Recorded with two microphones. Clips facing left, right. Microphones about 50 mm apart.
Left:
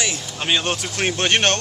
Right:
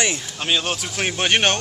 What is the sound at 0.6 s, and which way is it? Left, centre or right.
Speech, centre.